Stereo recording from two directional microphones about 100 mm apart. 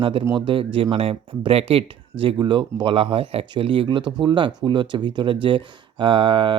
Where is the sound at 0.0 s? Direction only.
65° right (ahead or behind).